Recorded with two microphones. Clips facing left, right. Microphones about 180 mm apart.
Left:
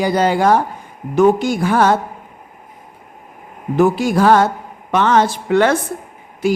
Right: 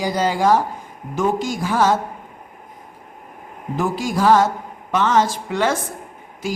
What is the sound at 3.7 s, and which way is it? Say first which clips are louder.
A woman's voice: left 8 dB; 65° left (ahead or behind).